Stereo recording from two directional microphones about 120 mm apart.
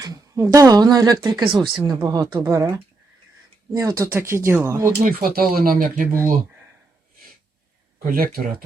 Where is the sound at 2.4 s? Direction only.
25° right (ahead or behind).